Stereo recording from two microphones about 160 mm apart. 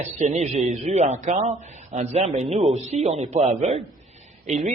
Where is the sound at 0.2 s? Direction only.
45° right (ahead or behind).